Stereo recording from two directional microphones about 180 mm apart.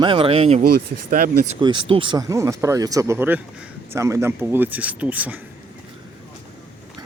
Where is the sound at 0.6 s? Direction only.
55° right (ahead or behind).